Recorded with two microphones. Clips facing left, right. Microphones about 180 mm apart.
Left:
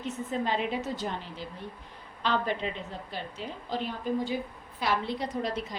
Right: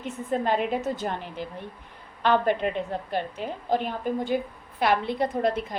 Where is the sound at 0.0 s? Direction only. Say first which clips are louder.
Right 4 dB; 55° right (ahead or behind).